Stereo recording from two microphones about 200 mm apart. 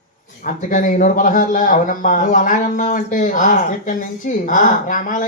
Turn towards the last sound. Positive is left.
turn(degrees=40)  # may be behind; listen again after turning